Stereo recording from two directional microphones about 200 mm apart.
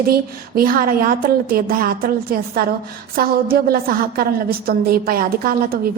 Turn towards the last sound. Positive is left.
turn(degrees=-50)  # may be behind; listen again after turning